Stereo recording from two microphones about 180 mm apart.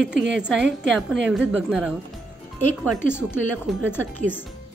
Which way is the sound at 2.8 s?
10° left (ahead or behind).